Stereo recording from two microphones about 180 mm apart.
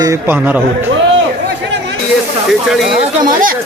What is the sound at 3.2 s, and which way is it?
Speech, 50° right (ahead or behind).